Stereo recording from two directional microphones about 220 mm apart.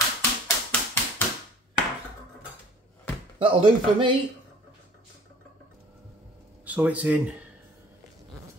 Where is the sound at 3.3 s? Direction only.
25° right (ahead or behind).